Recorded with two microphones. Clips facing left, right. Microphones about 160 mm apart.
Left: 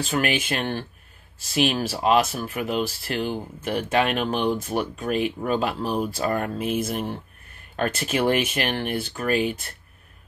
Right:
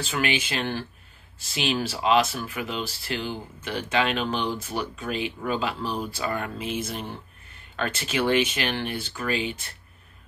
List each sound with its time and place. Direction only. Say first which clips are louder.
0.0 s speech: left 3 dB; 45° left (ahead or behind)